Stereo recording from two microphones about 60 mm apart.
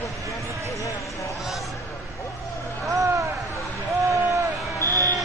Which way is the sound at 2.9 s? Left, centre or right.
Right.